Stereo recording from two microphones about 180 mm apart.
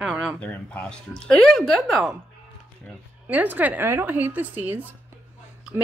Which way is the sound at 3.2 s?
10° right (ahead or behind).